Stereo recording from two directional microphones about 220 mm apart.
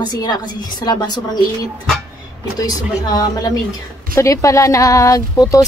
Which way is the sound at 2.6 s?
15° left (ahead or behind).